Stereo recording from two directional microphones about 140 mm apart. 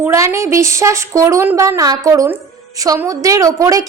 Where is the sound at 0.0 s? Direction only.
20° right (ahead or behind).